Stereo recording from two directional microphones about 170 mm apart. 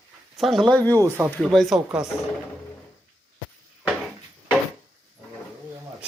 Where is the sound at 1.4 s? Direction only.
Centre (ahead or behind).